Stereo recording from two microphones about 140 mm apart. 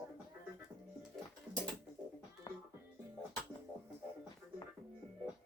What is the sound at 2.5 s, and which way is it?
Music, 30° left (ahead or behind).